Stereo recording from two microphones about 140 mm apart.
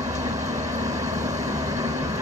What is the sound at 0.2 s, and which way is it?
Vehicle, 20° right (ahead or behind).